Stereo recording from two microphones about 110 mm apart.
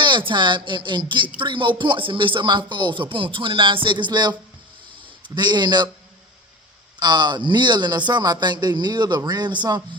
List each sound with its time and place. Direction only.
0.0 s a man's voice: 45° right (ahead or behind)
7.0 s a man's voice: 40° right (ahead or behind)